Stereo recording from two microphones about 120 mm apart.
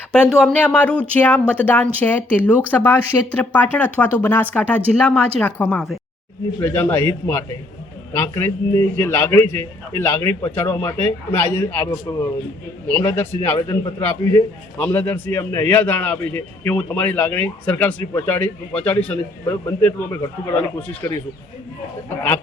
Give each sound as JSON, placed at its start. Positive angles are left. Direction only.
{"t": 0.1, "sound": "a man's voice", "side_deg": 5}